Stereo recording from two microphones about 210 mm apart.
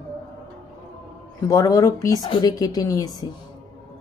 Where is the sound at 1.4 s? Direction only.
15° left (ahead or behind).